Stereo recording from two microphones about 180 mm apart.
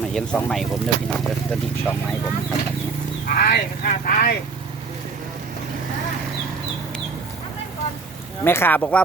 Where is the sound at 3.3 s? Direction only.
55° left (ahead or behind).